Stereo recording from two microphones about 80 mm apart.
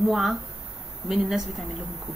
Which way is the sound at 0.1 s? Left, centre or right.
Centre.